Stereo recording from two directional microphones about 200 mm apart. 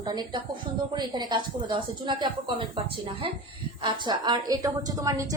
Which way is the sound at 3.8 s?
20° right (ahead or behind).